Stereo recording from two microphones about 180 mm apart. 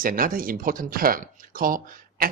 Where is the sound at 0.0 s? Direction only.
50° right (ahead or behind).